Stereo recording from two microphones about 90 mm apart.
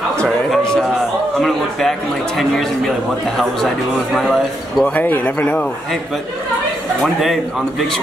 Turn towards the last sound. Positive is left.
turn(degrees=0)  # may be behind; listen again after turning